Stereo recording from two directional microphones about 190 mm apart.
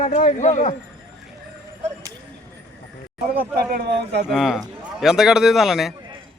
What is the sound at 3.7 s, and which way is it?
Speech, 55° right (ahead or behind).